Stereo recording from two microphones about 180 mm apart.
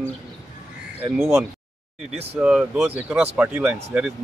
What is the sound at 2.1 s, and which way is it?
Speech, 35° right (ahead or behind).